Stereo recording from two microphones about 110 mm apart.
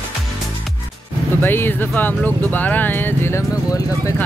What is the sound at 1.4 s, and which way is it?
Speech, 20° left (ahead or behind).